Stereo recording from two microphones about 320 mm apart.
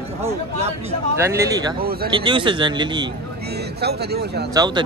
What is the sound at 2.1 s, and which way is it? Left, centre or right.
Speech, centre.